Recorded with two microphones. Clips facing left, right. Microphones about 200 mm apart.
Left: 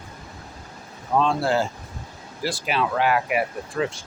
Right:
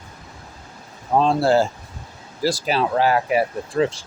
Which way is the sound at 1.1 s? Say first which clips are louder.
Right 4 dB; 35° right (ahead or behind).